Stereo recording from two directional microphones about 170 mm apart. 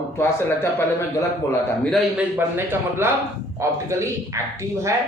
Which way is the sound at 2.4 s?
15° right (ahead or behind).